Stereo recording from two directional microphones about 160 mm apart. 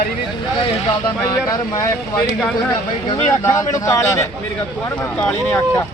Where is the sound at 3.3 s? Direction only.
15° left (ahead or behind).